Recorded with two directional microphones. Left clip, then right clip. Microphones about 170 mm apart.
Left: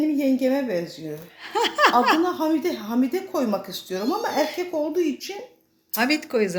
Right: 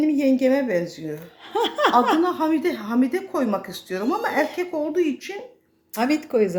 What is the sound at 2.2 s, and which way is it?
Speech, centre (ahead or behind).